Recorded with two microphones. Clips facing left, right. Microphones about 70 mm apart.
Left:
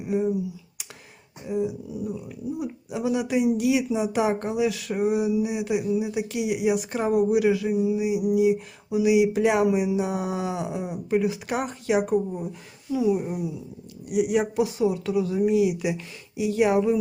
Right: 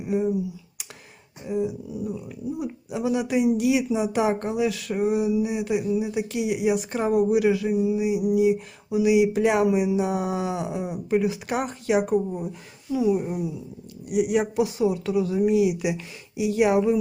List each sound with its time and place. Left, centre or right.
0.0 s speech: centre
1.5 s speech: centre